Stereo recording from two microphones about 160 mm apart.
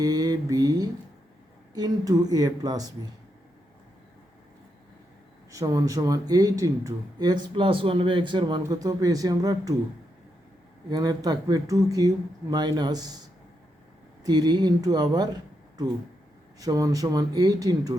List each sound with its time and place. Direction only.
0.0 s speech: 20° right (ahead or behind)
5.5 s speech: 20° right (ahead or behind)
10.9 s speech: 25° right (ahead or behind)
14.3 s speech: 25° right (ahead or behind)
16.6 s speech: 20° right (ahead or behind)